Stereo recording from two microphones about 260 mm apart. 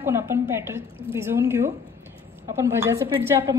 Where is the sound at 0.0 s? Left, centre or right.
Centre.